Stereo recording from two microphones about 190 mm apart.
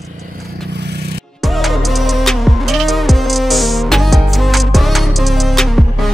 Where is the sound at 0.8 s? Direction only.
60° right (ahead or behind).